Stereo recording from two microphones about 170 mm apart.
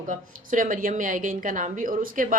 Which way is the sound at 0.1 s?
50° right (ahead or behind).